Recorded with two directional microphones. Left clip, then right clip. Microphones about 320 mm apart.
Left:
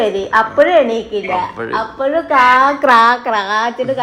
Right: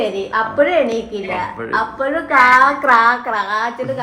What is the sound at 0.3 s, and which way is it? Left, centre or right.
A woman's voice, centre.